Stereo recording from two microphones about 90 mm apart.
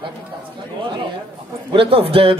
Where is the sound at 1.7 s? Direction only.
90° right.